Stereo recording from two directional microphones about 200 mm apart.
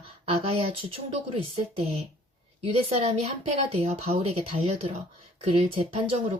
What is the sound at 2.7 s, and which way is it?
A woman's voice, 30° right (ahead or behind).